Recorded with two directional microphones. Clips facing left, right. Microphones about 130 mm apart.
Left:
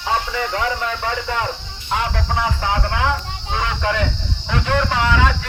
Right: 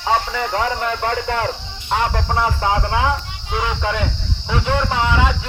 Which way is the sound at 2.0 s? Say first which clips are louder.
Right 3 dB; 45° right (ahead or behind).